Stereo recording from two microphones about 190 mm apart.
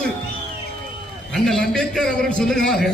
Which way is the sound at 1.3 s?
5° left (ahead or behind).